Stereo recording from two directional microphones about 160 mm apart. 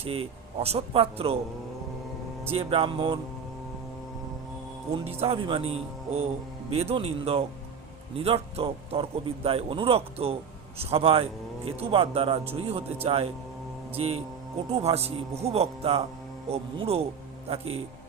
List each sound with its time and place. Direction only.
0.0 s speech: 35° right (ahead or behind)
2.5 s speech: 35° right (ahead or behind)
5.0 s speech: 40° right (ahead or behind)